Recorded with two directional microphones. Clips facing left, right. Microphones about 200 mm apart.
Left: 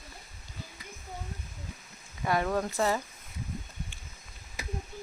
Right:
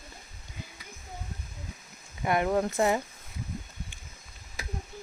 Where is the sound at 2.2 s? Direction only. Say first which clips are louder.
Right 3 dB; 20° right (ahead or behind).